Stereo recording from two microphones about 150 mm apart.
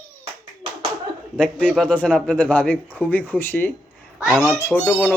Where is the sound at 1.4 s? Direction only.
5° left (ahead or behind).